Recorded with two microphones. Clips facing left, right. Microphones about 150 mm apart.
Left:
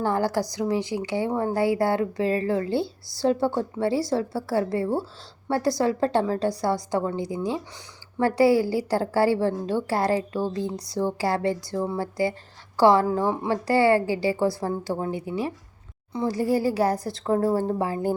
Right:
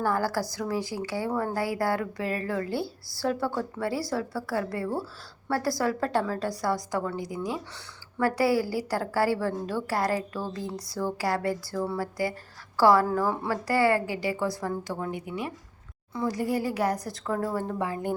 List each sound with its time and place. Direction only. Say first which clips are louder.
0.0 s a woman's voice: left 3 dB; 20° left (ahead or behind)